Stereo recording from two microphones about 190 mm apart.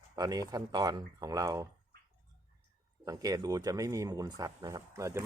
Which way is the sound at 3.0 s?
20° right (ahead or behind).